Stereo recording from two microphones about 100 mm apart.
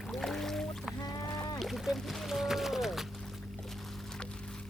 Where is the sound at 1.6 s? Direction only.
Centre (ahead or behind).